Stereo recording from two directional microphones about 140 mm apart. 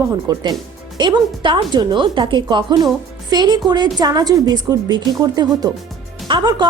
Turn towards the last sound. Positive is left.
turn(degrees=-30)  # may be behind; listen again after turning